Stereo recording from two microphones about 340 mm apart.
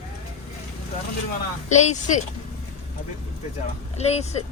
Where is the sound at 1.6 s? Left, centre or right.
Left.